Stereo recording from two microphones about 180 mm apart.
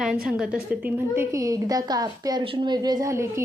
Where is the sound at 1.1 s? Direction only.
15° right (ahead or behind).